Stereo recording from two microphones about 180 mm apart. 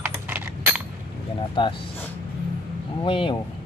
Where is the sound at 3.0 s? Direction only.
30° left (ahead or behind).